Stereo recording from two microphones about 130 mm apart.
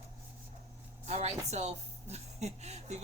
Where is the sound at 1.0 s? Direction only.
55° right (ahead or behind).